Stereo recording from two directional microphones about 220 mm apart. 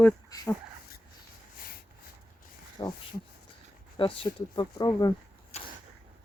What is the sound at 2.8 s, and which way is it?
Speech, 20° left (ahead or behind).